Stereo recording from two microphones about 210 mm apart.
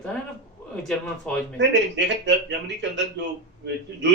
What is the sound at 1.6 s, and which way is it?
Speech, 55° right (ahead or behind).